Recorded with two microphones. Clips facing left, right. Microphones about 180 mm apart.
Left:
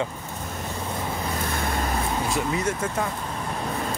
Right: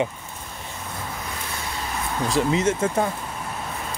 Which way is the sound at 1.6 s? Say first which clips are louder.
Left 5 dB; 50° left (ahead or behind).